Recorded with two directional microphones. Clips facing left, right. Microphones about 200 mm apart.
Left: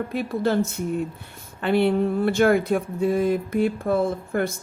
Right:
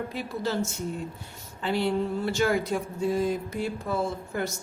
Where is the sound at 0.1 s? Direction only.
55° left (ahead or behind).